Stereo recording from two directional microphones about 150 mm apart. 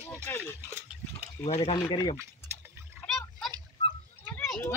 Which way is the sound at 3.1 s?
5° left (ahead or behind).